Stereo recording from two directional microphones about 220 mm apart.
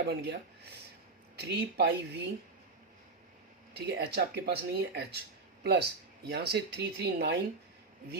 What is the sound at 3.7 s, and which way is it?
Speech, 50° right (ahead or behind).